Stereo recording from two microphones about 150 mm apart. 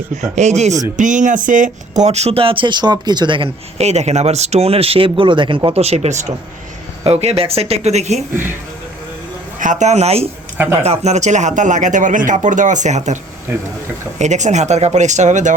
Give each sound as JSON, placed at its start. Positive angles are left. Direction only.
{"t": 0.1, "sound": "speech", "side_deg": -50}
{"t": 9.6, "sound": "speech", "side_deg": -55}
{"t": 14.2, "sound": "speech", "side_deg": -50}